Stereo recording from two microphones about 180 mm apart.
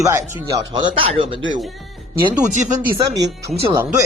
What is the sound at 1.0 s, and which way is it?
Speech, 30° right (ahead or behind).